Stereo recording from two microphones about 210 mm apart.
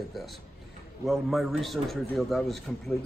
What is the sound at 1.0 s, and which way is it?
A man's voice, centre (ahead or behind).